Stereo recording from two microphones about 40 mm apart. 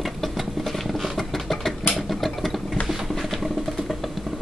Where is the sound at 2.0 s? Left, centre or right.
Centre.